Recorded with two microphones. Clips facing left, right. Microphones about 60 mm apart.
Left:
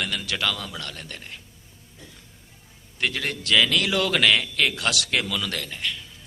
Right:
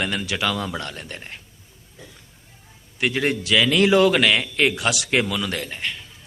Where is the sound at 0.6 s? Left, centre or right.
Right.